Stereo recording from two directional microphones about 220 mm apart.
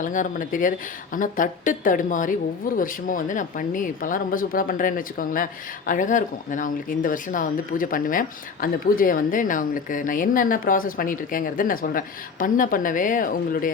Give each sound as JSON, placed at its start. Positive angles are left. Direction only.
{"t": 0.0, "sound": "a woman's voice", "side_deg": 35}